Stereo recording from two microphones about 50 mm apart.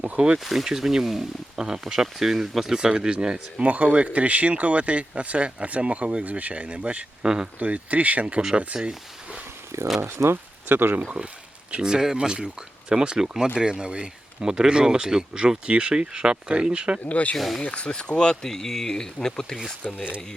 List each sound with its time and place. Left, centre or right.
0.0 s speech: right
0.3 s speech: centre
2.7 s speech: centre
9.7 s speech: right
10.3 s speech: right
11.7 s speech: centre
17.1 s speech: left
17.3 s speech: centre
17.6 s speech: left